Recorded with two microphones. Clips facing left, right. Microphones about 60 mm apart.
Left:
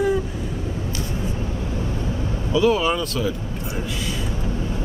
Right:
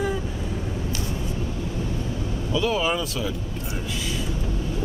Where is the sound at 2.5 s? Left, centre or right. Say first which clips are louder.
Left 5 dB; centre.